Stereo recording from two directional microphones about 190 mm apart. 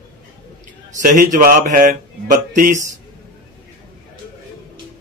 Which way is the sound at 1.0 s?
45° right (ahead or behind).